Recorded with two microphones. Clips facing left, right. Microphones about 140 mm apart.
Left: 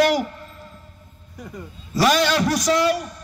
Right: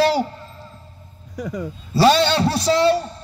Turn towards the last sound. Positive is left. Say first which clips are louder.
# right 3 dB
turn(degrees=-30)  # may be behind; listen again after turning